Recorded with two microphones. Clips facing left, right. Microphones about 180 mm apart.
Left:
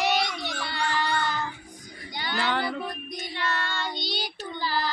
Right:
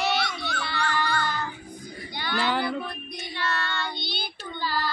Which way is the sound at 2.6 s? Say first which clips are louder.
Right 1 dB; 20° left (ahead or behind).